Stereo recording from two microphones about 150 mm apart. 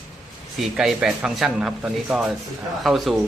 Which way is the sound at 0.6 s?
Centre (ahead or behind).